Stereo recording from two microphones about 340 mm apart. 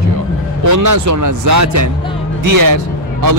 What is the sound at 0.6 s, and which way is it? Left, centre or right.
A man's voice, right.